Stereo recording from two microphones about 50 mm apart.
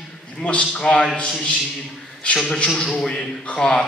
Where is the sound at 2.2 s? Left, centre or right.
Centre.